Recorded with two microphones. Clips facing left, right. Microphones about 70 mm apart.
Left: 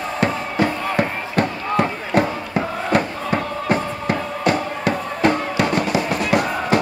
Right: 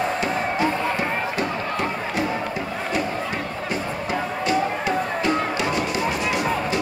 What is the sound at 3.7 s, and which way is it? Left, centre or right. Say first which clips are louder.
Music: left 5 dB; left.